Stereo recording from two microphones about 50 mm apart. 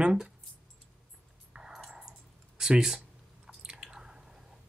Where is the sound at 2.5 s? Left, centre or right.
Centre.